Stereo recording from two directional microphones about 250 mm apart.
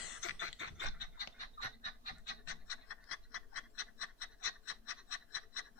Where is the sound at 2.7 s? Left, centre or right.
Left.